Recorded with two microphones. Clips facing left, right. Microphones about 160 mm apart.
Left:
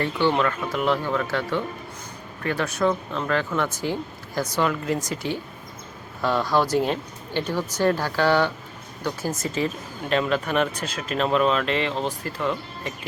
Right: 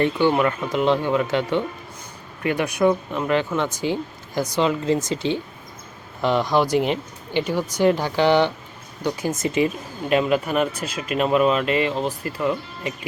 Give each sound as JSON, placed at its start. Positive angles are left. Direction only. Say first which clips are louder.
{"t": 0.0, "sound": "speech", "louder": "right 3 dB", "side_deg": -15}